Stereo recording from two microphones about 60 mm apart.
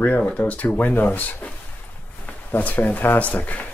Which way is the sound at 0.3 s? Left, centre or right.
Left.